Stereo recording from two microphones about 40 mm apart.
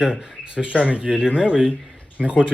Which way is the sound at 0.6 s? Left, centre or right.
Right.